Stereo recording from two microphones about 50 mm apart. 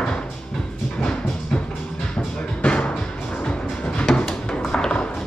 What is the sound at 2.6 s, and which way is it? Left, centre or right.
Music, left.